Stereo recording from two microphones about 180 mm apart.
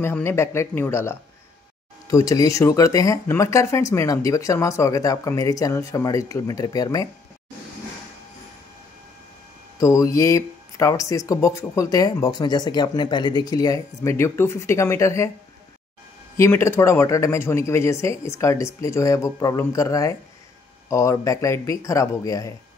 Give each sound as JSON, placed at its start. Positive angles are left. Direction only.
{"t": 0.0, "sound": "speech", "side_deg": 15}
{"t": 9.8, "sound": "speech", "side_deg": 15}
{"t": 16.3, "sound": "speech", "side_deg": 15}